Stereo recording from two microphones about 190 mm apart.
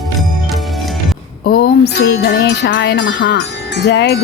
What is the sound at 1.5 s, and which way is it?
Music, 55° left (ahead or behind).